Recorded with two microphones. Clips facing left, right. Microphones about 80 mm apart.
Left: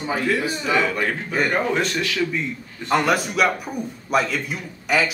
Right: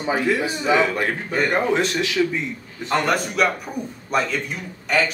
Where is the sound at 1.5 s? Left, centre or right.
Centre.